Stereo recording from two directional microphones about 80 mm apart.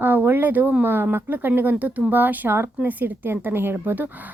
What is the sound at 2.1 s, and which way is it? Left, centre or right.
A woman's voice, right.